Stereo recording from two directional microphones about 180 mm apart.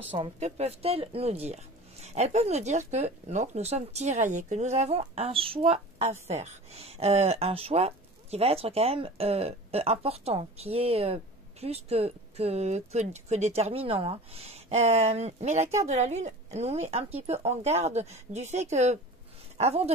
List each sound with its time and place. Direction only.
0.2 s speech: 35° right (ahead or behind)